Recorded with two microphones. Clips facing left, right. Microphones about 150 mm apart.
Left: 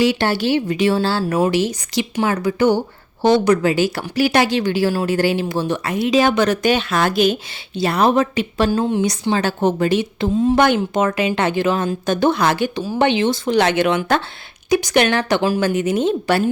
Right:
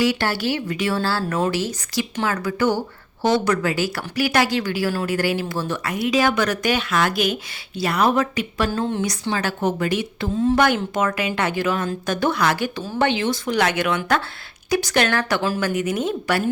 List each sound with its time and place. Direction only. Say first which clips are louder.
0.0 s speech: left 4 dB; 20° left (ahead or behind)